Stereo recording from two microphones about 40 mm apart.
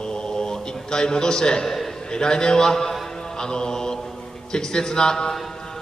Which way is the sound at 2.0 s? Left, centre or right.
Centre.